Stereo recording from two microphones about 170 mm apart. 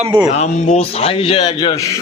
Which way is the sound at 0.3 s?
40° left (ahead or behind).